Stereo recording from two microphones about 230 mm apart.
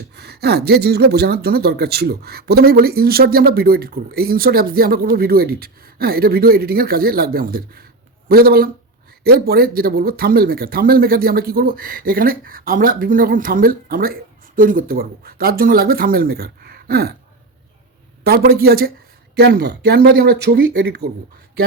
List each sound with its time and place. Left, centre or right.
0.2 s speech: right
18.2 s speech: right